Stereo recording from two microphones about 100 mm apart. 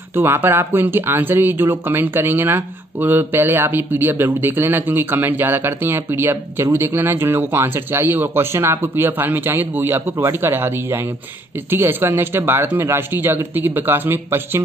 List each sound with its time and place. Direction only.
0.1 s speech: 20° right (ahead or behind)